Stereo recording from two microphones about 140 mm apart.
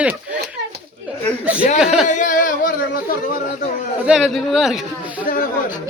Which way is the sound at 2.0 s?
65° left (ahead or behind).